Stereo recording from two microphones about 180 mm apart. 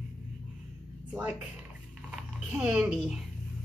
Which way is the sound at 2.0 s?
5° right (ahead or behind).